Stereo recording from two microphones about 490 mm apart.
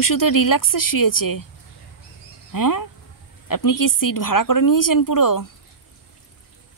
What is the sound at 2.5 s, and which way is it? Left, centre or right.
Speech, left.